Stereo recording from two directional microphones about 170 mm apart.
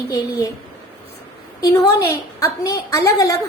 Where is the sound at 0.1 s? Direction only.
20° left (ahead or behind).